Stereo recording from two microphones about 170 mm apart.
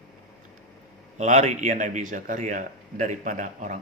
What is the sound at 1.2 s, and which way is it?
Speech, 45° right (ahead or behind).